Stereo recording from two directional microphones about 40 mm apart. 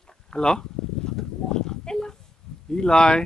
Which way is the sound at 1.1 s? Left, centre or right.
Centre.